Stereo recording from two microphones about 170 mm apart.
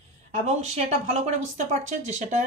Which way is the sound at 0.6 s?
40° right (ahead or behind).